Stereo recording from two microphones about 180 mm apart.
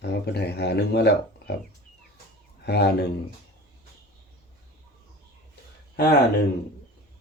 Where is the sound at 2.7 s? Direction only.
65° left (ahead or behind).